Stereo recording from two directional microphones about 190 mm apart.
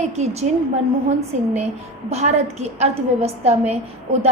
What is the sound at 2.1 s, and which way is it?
A woman's voice, 35° right (ahead or behind).